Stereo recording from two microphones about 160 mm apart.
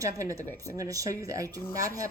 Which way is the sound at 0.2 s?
20° right (ahead or behind).